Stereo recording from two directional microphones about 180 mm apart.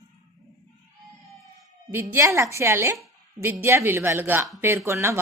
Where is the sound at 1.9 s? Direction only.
10° right (ahead or behind).